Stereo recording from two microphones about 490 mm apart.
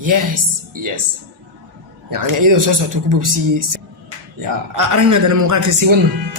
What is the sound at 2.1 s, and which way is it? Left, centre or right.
A man's voice, right.